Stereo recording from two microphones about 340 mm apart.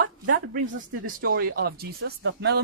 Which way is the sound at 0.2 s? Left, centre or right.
Right.